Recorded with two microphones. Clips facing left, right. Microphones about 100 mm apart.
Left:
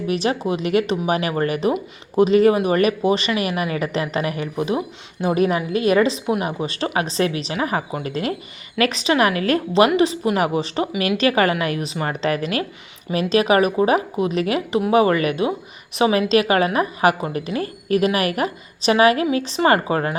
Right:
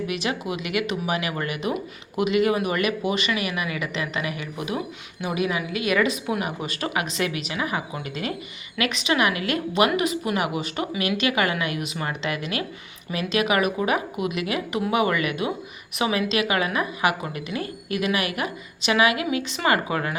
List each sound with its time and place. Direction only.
0.1 s a woman's voice: 35° left (ahead or behind)